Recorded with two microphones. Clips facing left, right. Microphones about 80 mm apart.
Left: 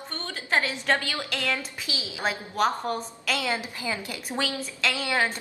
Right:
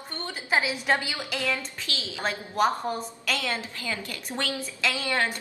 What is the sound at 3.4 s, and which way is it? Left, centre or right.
A woman's voice, centre.